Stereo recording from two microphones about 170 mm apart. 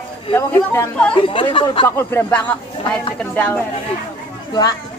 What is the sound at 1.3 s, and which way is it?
Speech, 30° left (ahead or behind).